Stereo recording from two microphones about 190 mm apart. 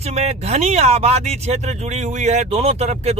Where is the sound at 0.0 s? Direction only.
35° right (ahead or behind).